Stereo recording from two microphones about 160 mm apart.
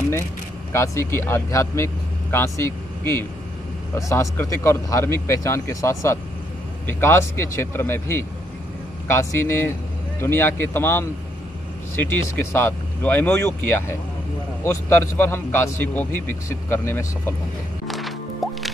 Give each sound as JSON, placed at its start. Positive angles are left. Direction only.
{"t": 0.7, "sound": "a man's voice", "side_deg": 15}
{"t": 17.8, "sound": "music", "side_deg": 0}